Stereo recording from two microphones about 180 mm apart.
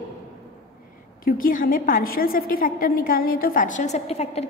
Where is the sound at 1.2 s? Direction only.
50° left (ahead or behind).